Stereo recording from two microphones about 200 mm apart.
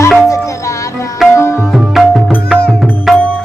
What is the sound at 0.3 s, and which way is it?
Music, 15° left (ahead or behind).